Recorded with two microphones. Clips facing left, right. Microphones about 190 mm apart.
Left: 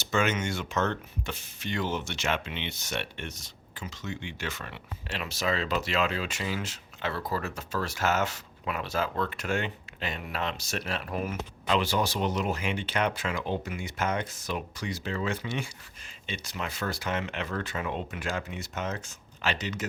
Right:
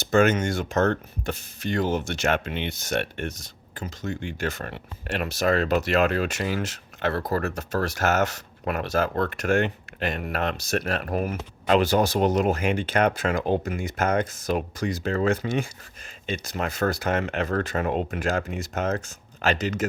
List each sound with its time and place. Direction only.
0.0 s speech: 55° right (ahead or behind)
5.0 s speech: 60° right (ahead or behind)
7.2 s speech: 40° right (ahead or behind)
7.4 s speech: 70° right (ahead or behind)
8.7 s speech: 50° right (ahead or behind)